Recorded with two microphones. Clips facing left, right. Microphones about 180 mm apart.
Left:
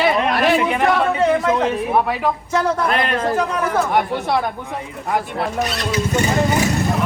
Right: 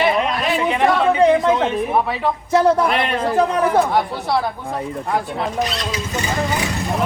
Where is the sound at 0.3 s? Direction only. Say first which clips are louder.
Left 4 dB; 70° left (ahead or behind).